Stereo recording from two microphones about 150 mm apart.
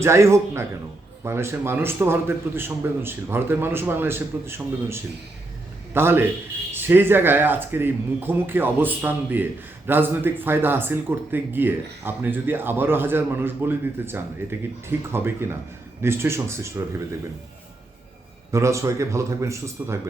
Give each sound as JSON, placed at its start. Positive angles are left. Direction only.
{"t": 0.0, "sound": "a man's voice", "side_deg": -20}
{"t": 18.5, "sound": "a man's voice", "side_deg": -20}